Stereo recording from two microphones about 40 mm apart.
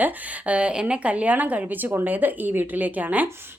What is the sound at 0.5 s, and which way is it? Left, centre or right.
A woman's voice, right.